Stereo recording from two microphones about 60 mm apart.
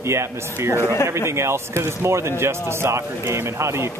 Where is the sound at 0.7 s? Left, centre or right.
Left.